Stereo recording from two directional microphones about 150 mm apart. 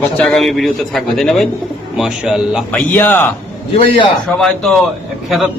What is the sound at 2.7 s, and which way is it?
Speech, 15° left (ahead or behind).